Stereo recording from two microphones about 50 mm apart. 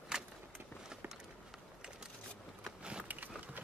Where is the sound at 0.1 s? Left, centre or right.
Centre.